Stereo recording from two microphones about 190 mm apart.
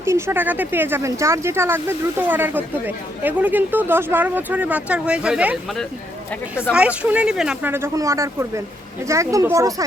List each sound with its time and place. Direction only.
0.0 s speech: 15° right (ahead or behind)